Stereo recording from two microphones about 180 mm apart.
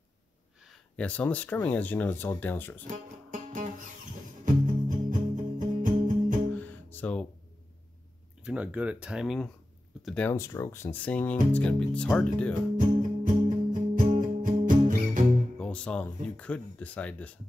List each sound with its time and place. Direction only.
0.7 s speech: 5° left (ahead or behind)
2.9 s music: 45° right (ahead or behind)
6.6 s music: 10° left (ahead or behind)
8.5 s speech: 5° right (ahead or behind)
12.7 s music: 45° right (ahead or behind)
15.6 s speech: 5° left (ahead or behind)